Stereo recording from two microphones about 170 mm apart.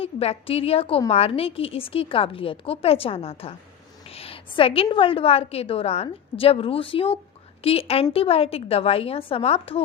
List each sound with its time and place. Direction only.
0.0 s a woman's voice: 35° left (ahead or behind)